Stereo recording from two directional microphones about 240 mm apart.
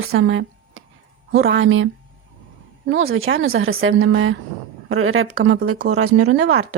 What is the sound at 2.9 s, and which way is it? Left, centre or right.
Speech, right.